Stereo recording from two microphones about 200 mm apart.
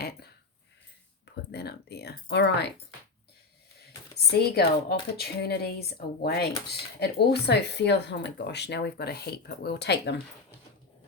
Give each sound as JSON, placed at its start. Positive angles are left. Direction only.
{"t": 1.5, "sound": "speech", "side_deg": 55}
{"t": 4.4, "sound": "speech", "side_deg": 55}